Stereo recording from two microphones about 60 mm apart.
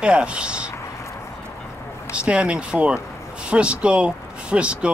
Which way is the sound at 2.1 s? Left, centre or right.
Centre.